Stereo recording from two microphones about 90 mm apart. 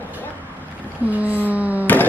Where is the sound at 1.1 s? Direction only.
20° right (ahead or behind).